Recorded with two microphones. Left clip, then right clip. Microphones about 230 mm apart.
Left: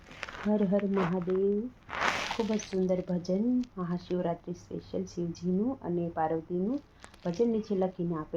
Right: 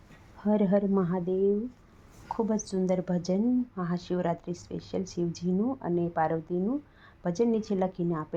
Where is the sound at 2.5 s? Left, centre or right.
Right.